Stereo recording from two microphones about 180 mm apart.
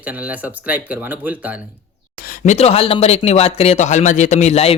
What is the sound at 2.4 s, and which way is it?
Speech, 40° left (ahead or behind).